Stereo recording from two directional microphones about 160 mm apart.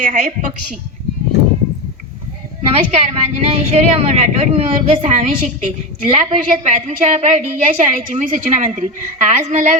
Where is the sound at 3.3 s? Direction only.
40° right (ahead or behind).